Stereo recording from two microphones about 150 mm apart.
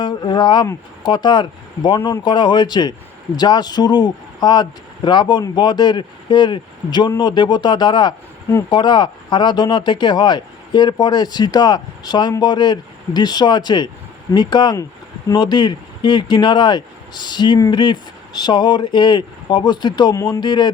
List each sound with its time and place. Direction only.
0.0 s speech: 30° left (ahead or behind)